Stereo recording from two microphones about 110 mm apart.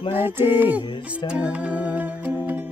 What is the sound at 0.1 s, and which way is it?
Music, 20° right (ahead or behind).